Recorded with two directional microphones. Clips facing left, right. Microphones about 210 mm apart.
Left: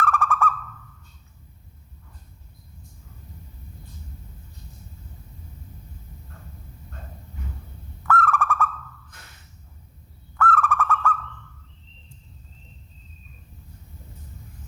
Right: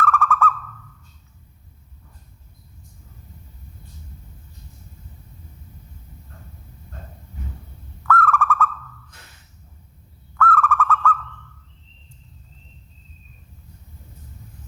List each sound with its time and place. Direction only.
0.0 s owl: 15° left (ahead or behind)
8.0 s owl: 15° left (ahead or behind)
10.3 s owl: 15° left (ahead or behind)